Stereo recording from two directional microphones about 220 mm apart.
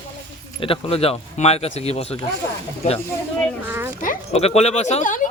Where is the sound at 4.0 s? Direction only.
35° left (ahead or behind).